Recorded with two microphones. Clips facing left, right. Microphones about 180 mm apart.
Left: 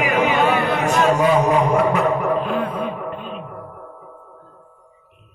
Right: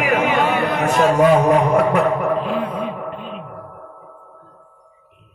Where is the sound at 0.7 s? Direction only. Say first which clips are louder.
Right 2 dB; 50° right (ahead or behind).